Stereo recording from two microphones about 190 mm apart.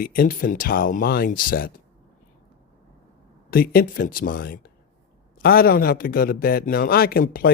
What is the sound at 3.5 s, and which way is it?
Speech, 50° left (ahead or behind).